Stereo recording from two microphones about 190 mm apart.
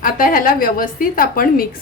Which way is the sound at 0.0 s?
45° left (ahead or behind).